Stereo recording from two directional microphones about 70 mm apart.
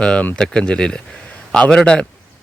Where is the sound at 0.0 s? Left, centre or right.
Centre.